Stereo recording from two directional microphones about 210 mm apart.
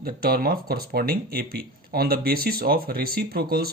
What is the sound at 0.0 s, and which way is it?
Speech, 45° right (ahead or behind).